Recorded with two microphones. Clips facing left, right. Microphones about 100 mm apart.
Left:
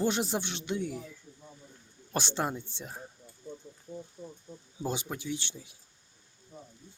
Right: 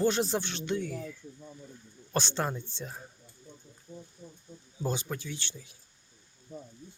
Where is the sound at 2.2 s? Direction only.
15° left (ahead or behind).